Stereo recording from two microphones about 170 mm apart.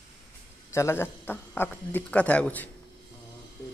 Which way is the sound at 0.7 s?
15° left (ahead or behind).